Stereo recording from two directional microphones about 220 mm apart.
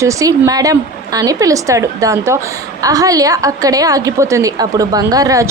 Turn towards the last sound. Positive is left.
turn(degrees=-15)  # may be behind; listen again after turning